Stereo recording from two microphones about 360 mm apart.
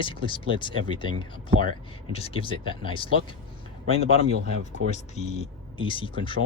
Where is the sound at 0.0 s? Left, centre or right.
Centre.